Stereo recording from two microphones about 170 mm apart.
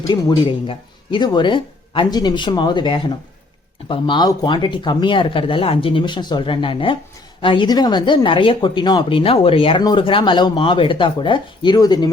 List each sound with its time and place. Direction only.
0.1 s speech: 25° left (ahead or behind)